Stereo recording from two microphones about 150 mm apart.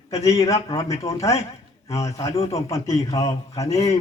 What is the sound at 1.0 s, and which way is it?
A man's voice, 20° left (ahead or behind).